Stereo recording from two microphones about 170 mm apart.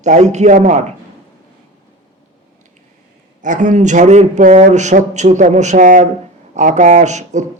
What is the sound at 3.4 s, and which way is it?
A man's voice, 50° right (ahead or behind).